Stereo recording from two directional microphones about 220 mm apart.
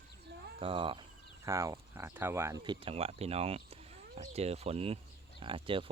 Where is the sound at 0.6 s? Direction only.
25° right (ahead or behind).